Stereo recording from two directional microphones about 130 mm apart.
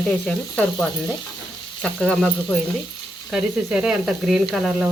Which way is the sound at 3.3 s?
5° right (ahead or behind).